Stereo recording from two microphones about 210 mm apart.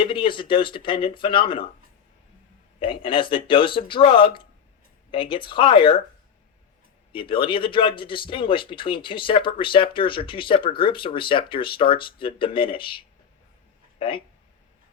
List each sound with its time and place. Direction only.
0.0 s speech: 25° left (ahead or behind)
2.7 s speech: 25° left (ahead or behind)
7.1 s speech: 25° left (ahead or behind)